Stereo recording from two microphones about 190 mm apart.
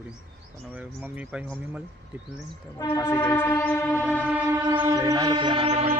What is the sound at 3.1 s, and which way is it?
Train, 25° left (ahead or behind).